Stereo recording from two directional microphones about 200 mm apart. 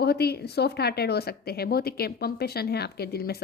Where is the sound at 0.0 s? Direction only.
55° left (ahead or behind).